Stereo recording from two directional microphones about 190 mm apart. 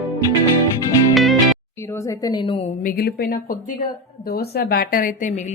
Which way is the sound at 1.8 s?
15° left (ahead or behind).